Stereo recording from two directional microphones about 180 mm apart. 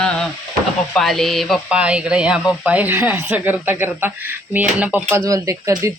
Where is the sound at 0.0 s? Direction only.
5° left (ahead or behind).